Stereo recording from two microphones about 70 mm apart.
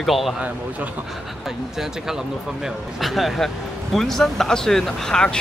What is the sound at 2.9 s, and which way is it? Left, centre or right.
Speech, centre.